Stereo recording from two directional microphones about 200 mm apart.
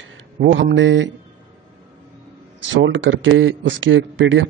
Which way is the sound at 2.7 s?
65° right (ahead or behind).